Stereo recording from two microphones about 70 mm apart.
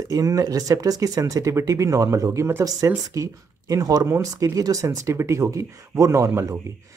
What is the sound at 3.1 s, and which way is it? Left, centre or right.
Speech, right.